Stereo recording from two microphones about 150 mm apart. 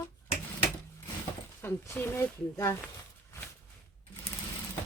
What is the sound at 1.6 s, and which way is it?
Speech, 15° left (ahead or behind).